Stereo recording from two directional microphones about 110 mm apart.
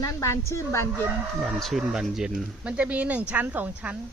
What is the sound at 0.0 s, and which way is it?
A woman's voice, 30° left (ahead or behind).